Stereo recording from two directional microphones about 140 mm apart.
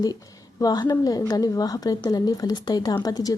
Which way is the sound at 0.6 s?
30° left (ahead or behind).